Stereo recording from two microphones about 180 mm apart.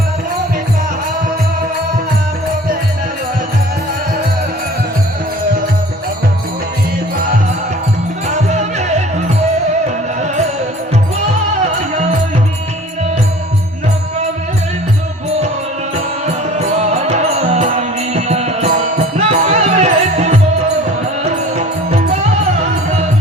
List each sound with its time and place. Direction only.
8.3 s music: 40° right (ahead or behind)
16.2 s music: 40° right (ahead or behind)
21.5 s music: 40° right (ahead or behind)